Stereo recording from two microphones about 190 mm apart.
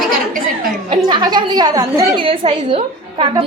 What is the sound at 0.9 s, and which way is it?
A woman's voice, 25° right (ahead or behind).